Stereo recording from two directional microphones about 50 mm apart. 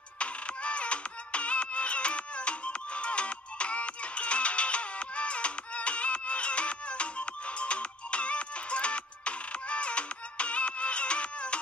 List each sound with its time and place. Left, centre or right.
0.2 s music: left